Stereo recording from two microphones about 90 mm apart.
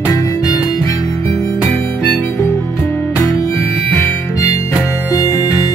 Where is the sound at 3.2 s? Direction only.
30° left (ahead or behind).